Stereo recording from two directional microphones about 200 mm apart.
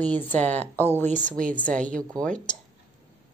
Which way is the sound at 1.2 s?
40° right (ahead or behind).